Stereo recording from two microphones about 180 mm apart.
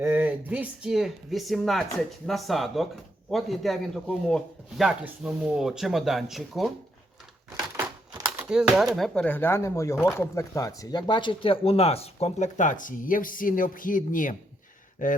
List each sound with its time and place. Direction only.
0.0 s speech: 10° right (ahead or behind)
7.8 s speech: 10° right (ahead or behind); by 15.1 s 45° left (ahead or behind)